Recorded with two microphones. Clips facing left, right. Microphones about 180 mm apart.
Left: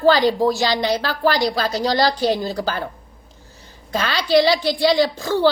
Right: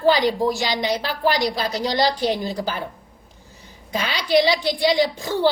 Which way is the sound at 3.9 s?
15° right (ahead or behind).